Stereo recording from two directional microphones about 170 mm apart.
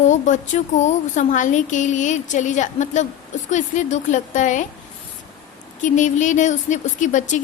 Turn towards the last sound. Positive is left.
turn(degrees=45)  # may be behind; listen again after turning